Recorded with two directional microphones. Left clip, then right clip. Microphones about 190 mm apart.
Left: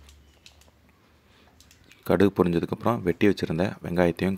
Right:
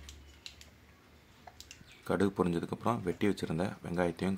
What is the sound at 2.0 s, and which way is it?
Speech, 35° left (ahead or behind).